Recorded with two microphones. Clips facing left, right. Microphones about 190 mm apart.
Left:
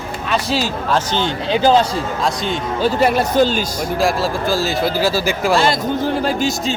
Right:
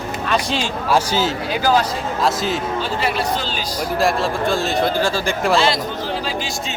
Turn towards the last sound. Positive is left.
turn(degrees=45)  # may be behind; listen again after turning